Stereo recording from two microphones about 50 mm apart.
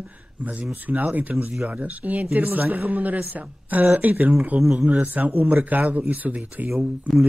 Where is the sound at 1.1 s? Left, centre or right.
Right.